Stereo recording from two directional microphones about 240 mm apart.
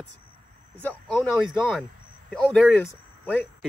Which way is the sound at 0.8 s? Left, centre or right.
Centre.